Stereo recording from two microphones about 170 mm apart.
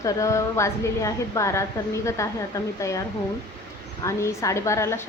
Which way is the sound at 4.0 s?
15° left (ahead or behind).